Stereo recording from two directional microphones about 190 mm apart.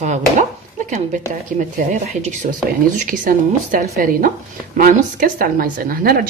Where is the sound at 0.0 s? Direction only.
40° right (ahead or behind).